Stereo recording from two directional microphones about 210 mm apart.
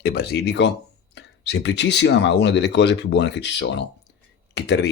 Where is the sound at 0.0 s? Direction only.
50° left (ahead or behind).